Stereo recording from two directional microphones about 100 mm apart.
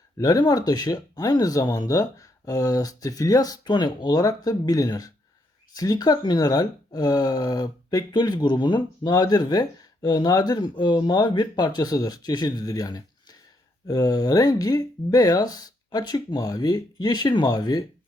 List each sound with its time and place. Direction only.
0.2 s speech: 40° left (ahead or behind)